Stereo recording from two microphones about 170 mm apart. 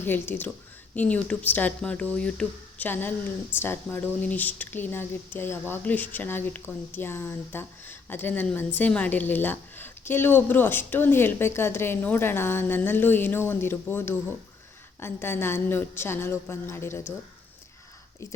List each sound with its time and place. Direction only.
0.0 s speech: 10° left (ahead or behind)
18.2 s speech: 15° left (ahead or behind)